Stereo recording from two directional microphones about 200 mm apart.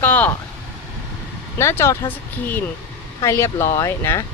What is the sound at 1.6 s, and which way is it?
Speech, 15° left (ahead or behind).